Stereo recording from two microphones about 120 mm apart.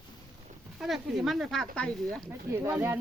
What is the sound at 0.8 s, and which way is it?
Speech, centre (ahead or behind).